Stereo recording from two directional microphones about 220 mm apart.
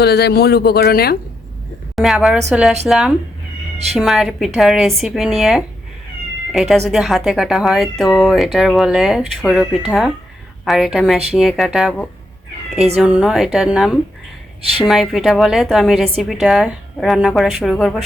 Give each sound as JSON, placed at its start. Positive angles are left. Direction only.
{"t": 0.0, "sound": "speech", "side_deg": 50}
{"t": 2.0, "sound": "a woman's voice", "side_deg": 0}